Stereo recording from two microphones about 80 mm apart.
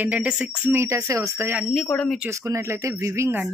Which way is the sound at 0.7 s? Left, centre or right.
Right.